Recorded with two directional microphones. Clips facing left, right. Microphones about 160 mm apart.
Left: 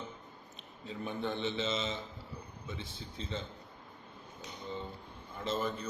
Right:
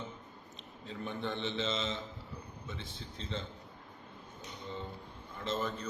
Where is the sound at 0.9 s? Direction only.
5° left (ahead or behind).